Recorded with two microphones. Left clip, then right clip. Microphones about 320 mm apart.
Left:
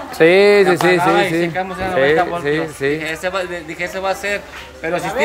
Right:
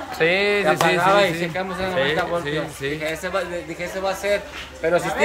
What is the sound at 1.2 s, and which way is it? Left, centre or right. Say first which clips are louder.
Speech: left 3 dB; centre.